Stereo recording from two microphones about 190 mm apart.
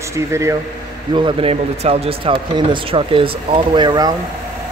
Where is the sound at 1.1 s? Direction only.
30° right (ahead or behind).